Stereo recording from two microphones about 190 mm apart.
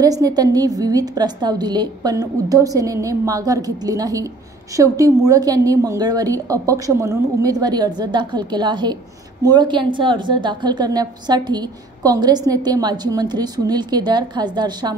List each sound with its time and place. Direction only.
0.0 s a woman's voice: 20° right (ahead or behind)